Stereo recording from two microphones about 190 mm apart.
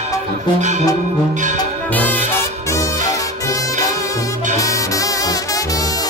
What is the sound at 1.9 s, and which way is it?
Music, 10° left (ahead or behind).